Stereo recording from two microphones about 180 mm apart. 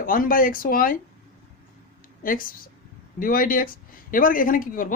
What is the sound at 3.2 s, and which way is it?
Speech, 50° left (ahead or behind).